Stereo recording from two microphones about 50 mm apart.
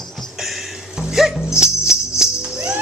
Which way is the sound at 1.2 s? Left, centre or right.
Centre.